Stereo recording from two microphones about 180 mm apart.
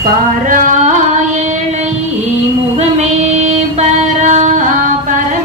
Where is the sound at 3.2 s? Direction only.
40° right (ahead or behind).